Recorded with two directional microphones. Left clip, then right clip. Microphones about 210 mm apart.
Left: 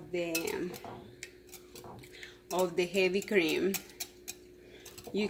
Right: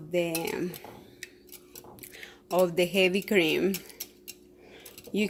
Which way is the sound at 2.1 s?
45° right (ahead or behind).